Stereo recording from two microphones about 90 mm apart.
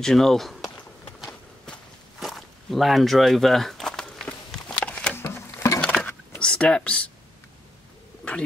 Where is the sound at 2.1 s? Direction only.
Centre (ahead or behind).